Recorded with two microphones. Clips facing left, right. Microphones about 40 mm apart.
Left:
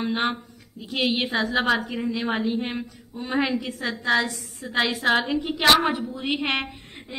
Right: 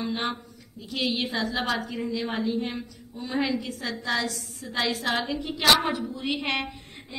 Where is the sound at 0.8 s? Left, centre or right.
Left.